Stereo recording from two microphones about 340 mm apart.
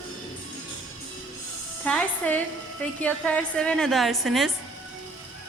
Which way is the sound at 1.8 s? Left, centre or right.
Centre.